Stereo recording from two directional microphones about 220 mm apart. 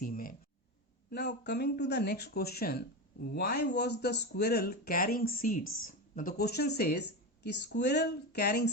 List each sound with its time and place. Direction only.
0.0 s speech: 40° left (ahead or behind)